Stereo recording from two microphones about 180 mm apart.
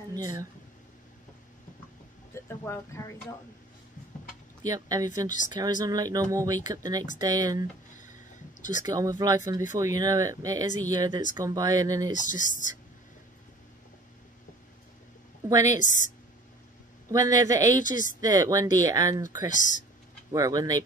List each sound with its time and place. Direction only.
2.4 s speech: 15° left (ahead or behind)
4.6 s speech: 20° right (ahead or behind)
8.0 s a sound: 45° left (ahead or behind)
8.8 s speech: 20° right (ahead or behind)
12.1 s speech: 45° left (ahead or behind)
15.4 s speech: 20° right (ahead or behind)
15.8 s speech: 45° left (ahead or behind)
17.1 s speech: 20° right (ahead or behind)
19.5 s speech: 45° left (ahead or behind)
20.2 s speech: 20° right (ahead or behind)